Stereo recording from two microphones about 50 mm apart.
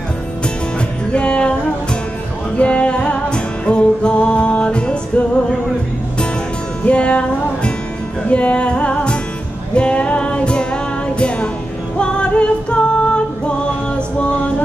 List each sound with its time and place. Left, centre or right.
1.1 s music: left
2.5 s music: left
6.8 s music: left